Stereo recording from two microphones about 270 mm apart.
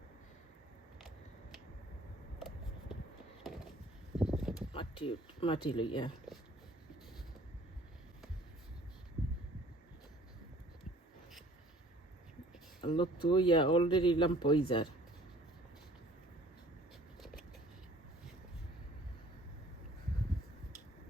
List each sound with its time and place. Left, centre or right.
4.2 s a sound: centre
4.7 s speech: centre
12.8 s a man's voice: centre